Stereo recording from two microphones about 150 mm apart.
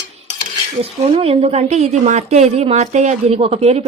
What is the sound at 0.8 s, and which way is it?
A woman's voice, 40° right (ahead or behind).